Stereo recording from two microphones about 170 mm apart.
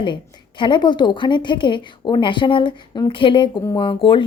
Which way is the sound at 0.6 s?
25° left (ahead or behind).